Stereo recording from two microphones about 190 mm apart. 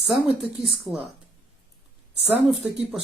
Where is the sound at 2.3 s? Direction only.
10° right (ahead or behind).